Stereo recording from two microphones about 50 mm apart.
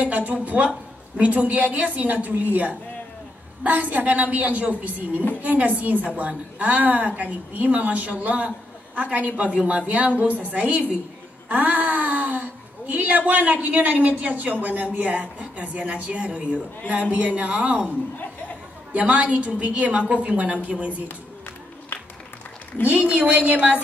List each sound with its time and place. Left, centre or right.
0.0 s a woman's voice: right
18.9 s a woman's voice: right
22.8 s a woman's voice: right